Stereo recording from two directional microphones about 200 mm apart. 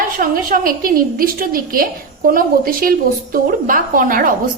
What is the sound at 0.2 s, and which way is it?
A woman's voice, 45° right (ahead or behind).